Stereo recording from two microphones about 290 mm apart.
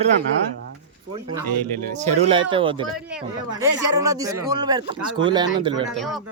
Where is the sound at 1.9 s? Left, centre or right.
Right.